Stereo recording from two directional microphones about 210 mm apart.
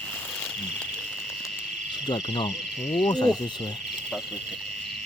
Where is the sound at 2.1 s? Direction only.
20° left (ahead or behind).